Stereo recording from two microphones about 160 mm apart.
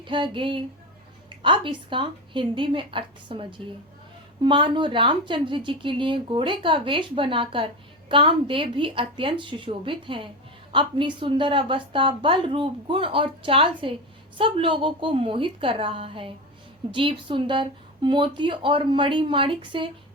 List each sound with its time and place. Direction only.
0.0 s a woman's voice: 30° right (ahead or behind)
4.4 s a woman's voice: 30° right (ahead or behind)